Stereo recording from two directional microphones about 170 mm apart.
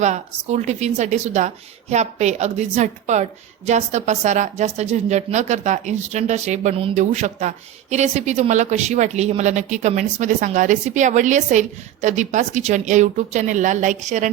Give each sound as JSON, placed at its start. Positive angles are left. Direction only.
{"t": 0.0, "sound": "a woman's voice", "side_deg": -45}